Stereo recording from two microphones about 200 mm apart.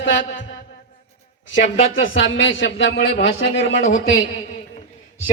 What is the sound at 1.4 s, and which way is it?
A man's voice, 70° left (ahead or behind).